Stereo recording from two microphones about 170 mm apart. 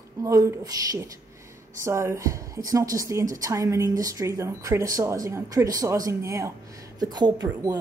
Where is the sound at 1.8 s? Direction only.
15° right (ahead or behind).